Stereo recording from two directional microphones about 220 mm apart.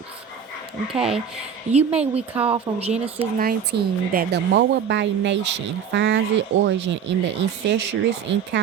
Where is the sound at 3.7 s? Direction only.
50° right (ahead or behind).